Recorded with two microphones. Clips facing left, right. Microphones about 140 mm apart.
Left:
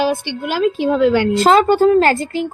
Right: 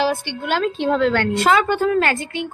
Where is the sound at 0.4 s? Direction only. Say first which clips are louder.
Left 3 dB; 5° left (ahead or behind).